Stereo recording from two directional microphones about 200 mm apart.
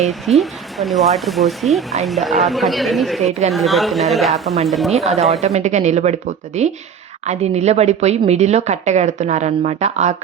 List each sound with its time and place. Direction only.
0.1 s speech: centre (ahead or behind)
5.4 s a woman's voice: 35° right (ahead or behind)